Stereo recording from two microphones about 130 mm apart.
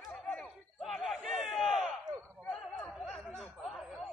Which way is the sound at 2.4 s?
10° left (ahead or behind).